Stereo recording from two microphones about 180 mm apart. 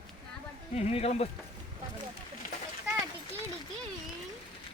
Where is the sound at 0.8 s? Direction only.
35° left (ahead or behind).